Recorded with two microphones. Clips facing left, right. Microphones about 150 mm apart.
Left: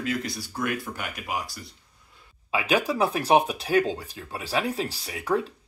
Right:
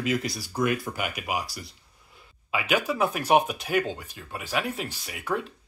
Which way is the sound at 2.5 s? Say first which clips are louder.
Left 2 dB; 30° left (ahead or behind).